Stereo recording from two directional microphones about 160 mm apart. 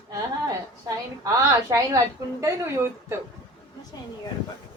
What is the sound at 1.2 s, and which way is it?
A woman's voice, 20° right (ahead or behind).